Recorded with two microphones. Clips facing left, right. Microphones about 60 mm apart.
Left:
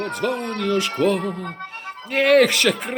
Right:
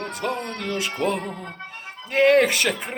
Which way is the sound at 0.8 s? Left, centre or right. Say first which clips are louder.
Left 3 dB; centre.